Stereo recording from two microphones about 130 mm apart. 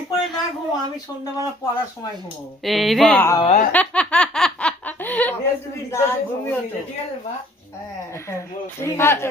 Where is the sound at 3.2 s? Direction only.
20° left (ahead or behind).